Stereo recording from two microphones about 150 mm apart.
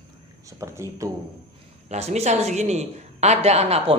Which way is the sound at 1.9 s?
45° right (ahead or behind).